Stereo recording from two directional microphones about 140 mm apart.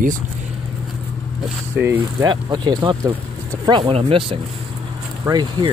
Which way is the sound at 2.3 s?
30° right (ahead or behind).